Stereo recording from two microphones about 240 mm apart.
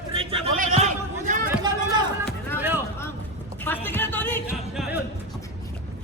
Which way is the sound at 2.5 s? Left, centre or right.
Centre.